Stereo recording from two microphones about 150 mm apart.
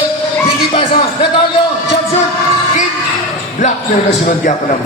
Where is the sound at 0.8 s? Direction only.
35° left (ahead or behind).